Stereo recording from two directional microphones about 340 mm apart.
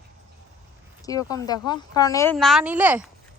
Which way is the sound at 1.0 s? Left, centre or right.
Centre.